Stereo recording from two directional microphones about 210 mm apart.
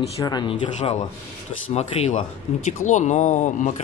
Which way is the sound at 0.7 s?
35° left (ahead or behind).